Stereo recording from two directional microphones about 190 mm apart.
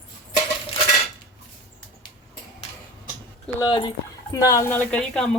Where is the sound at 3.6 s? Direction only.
25° left (ahead or behind); by 5.4 s 5° left (ahead or behind).